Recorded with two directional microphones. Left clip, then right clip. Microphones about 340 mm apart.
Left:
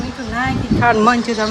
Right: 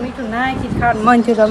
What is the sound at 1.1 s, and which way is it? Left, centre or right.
Speech, centre.